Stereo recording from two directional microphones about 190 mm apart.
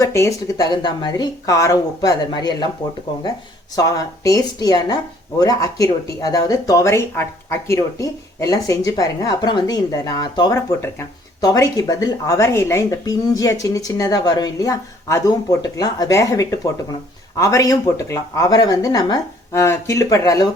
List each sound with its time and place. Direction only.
0.0 s speech: 15° left (ahead or behind)
3.8 s speech: 20° left (ahead or behind)